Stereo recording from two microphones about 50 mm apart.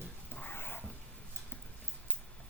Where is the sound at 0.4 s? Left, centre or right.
Left.